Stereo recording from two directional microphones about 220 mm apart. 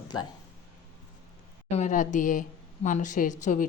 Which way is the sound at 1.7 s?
35° left (ahead or behind).